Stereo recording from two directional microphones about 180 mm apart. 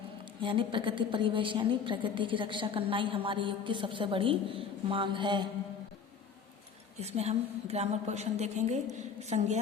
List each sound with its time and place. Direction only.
0.4 s a woman's voice: 25° right (ahead or behind)
7.0 s a woman's voice: 35° right (ahead or behind)